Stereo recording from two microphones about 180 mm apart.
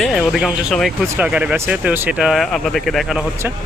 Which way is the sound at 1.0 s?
10° right (ahead or behind).